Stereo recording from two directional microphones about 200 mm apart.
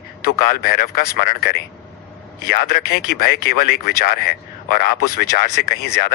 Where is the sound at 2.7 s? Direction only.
50° left (ahead or behind).